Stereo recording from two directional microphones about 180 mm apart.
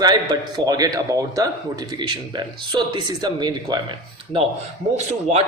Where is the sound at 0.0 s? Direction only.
20° right (ahead or behind).